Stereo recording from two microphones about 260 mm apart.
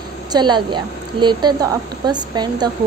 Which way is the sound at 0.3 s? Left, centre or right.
Centre.